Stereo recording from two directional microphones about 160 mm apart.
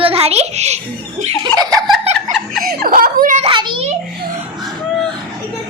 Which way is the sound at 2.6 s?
65° right (ahead or behind).